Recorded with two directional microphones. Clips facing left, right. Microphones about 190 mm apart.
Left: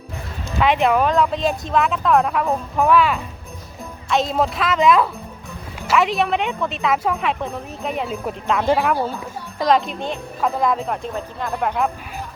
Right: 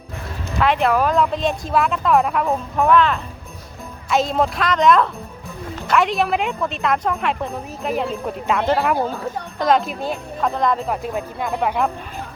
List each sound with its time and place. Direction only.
0.6 s a woman's voice: centre (ahead or behind)